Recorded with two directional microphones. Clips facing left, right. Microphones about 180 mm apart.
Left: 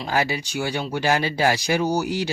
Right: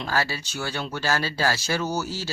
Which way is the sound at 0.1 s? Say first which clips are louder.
Left 5 dB; 15° left (ahead or behind).